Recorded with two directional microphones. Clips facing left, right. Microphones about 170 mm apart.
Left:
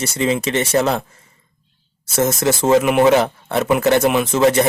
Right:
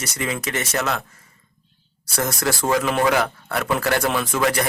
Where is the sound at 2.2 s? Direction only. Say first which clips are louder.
Left 6 dB; 20° left (ahead or behind).